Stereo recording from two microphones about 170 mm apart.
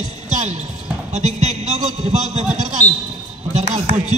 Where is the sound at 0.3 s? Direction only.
45° right (ahead or behind).